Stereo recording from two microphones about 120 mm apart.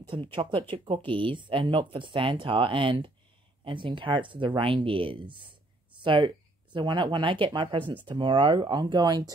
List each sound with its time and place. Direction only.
0.1 s speech: 45° right (ahead or behind)